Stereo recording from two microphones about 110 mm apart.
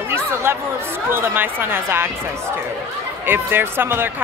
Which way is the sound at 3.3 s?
20° right (ahead or behind).